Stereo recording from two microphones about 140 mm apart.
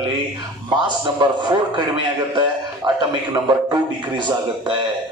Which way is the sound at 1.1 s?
35° right (ahead or behind).